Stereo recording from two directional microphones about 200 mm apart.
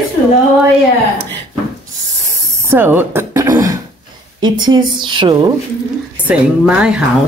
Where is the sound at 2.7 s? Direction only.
10° right (ahead or behind).